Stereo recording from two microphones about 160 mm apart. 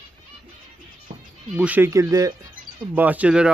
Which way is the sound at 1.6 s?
10° right (ahead or behind).